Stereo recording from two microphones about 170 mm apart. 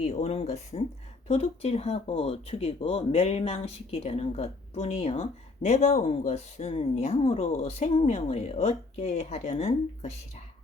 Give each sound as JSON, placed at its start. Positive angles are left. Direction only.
{"t": 0.0, "sound": "speech", "side_deg": 45}